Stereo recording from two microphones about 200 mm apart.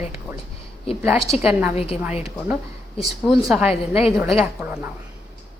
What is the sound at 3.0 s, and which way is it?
A woman's voice, centre (ahead or behind).